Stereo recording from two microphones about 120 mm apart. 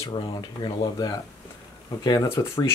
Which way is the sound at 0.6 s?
30° left (ahead or behind).